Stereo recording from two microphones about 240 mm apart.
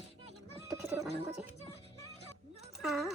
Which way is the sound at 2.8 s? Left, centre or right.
Centre.